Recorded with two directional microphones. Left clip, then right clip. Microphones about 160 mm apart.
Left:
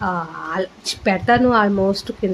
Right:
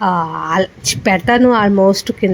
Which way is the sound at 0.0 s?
40° right (ahead or behind).